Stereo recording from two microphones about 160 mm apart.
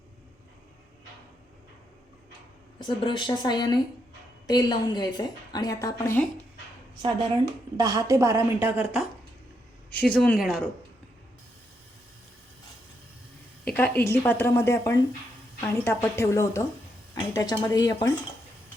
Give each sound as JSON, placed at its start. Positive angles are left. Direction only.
{"t": 2.8, "sound": "a woman's voice", "side_deg": 30}
{"t": 7.8, "sound": "a woman's voice", "side_deg": -20}
{"t": 9.9, "sound": "speech", "side_deg": 10}
{"t": 13.7, "sound": "a woman's voice", "side_deg": 10}